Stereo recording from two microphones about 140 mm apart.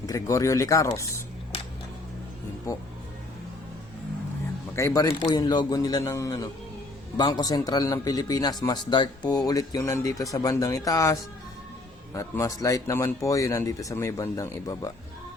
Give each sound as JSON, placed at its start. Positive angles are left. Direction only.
{"t": 0.0, "sound": "speech", "side_deg": 25}
{"t": 4.7, "sound": "speech", "side_deg": 20}